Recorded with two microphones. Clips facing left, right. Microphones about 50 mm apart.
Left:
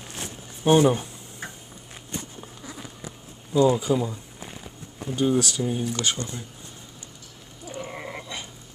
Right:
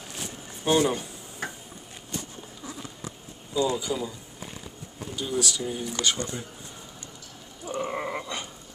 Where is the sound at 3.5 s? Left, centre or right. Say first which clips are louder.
Left 6 dB; left.